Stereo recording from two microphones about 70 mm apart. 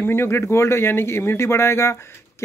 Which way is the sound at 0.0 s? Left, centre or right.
Left.